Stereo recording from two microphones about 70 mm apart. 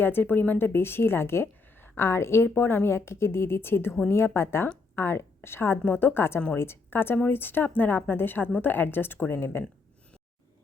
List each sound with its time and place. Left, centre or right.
0.0 s a woman's voice: left